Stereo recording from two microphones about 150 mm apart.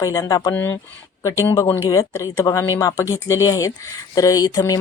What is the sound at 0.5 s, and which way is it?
Speech, 15° left (ahead or behind).